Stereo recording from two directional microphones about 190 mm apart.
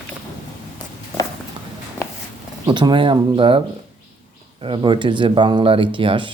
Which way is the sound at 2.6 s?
25° right (ahead or behind).